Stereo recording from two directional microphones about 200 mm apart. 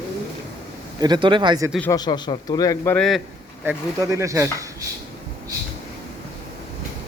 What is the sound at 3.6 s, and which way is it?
Speech, 15° right (ahead or behind).